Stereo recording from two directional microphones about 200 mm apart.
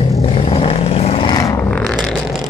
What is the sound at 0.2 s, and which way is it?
Vehicle, 30° left (ahead or behind).